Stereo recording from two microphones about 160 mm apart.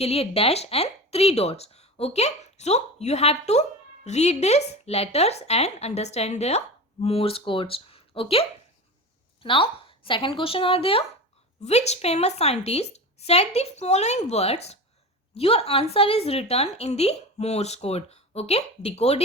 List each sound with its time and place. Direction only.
0.0 s a woman's voice: 40° left (ahead or behind)